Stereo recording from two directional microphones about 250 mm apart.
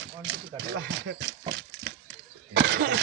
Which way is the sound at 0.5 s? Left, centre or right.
Right.